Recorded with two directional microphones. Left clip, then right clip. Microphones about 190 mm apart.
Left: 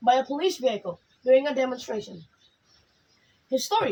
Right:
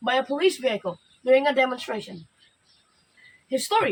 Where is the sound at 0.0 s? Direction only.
15° right (ahead or behind).